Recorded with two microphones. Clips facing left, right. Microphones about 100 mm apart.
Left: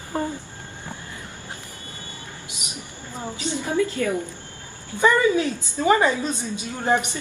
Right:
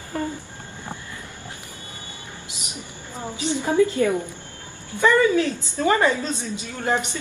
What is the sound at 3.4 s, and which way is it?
Speech, 20° right (ahead or behind).